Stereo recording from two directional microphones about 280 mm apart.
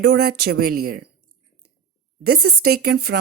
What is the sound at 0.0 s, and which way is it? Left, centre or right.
Speech, right.